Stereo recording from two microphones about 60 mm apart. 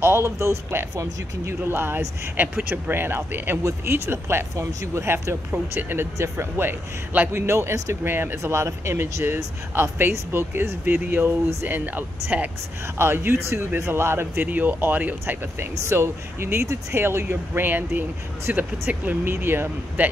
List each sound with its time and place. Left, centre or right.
0.0 s speech: right
5.5 s speech: right
6.1 s speech: right
8.0 s speech: right
8.4 s speech: right
9.0 s speech: right
13.0 s speech: right
14.5 s speech: right
15.9 s speech: right